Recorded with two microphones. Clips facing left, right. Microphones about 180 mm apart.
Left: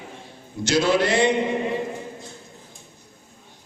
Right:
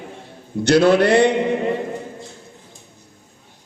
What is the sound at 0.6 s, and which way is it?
Speech, 60° right (ahead or behind).